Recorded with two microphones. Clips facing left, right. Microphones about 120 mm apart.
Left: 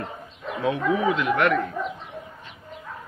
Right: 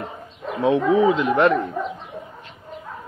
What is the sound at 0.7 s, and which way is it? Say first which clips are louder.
Speech: right 6 dB; 30° right (ahead or behind).